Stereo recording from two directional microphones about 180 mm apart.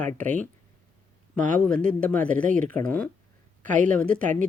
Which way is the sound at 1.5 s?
5° left (ahead or behind).